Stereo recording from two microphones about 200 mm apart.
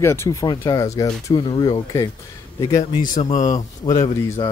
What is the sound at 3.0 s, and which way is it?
Speech, 40° left (ahead or behind).